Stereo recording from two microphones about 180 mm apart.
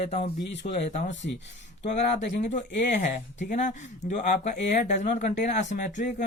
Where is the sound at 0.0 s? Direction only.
40° left (ahead or behind).